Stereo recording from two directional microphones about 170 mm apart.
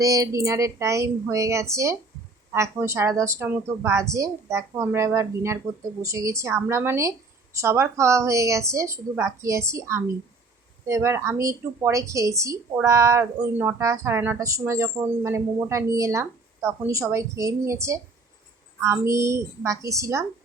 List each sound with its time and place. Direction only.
0.0 s a woman's voice: 20° right (ahead or behind)